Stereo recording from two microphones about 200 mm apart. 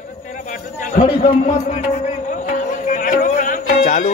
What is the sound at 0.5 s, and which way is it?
A man's voice, 40° left (ahead or behind).